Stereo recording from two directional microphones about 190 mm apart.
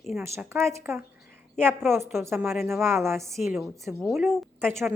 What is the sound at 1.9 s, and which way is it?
A woman's voice, 15° right (ahead or behind).